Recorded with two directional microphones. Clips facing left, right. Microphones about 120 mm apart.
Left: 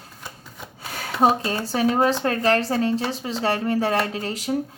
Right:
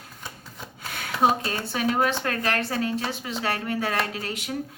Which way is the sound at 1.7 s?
35° left (ahead or behind).